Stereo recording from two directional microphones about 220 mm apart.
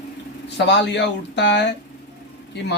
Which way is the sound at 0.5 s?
50° left (ahead or behind).